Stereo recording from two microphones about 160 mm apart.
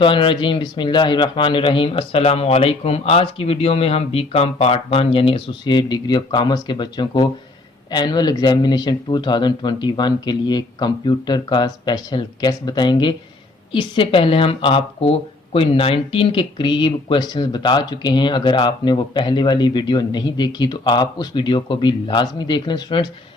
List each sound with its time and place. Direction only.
0.0 s a man's voice: 30° left (ahead or behind)